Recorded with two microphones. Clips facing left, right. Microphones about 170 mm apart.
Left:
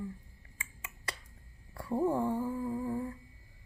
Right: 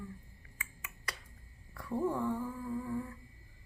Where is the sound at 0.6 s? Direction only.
25° left (ahead or behind).